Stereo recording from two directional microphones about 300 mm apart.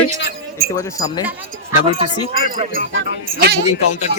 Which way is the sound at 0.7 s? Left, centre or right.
Centre.